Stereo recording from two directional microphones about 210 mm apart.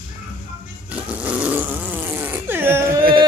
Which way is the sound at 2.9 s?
45° right (ahead or behind).